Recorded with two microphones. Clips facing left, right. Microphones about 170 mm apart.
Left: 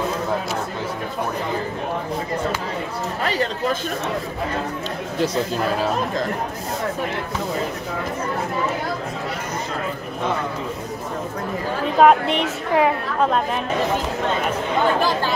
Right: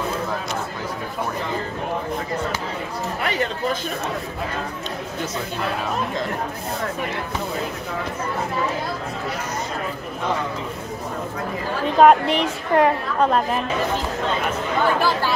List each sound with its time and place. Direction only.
3.2 s chatter: 35° left (ahead or behind)
11.8 s a woman's voice: centre (ahead or behind)